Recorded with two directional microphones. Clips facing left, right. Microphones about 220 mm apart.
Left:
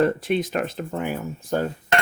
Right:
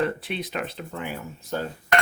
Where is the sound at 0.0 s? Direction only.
45° left (ahead or behind).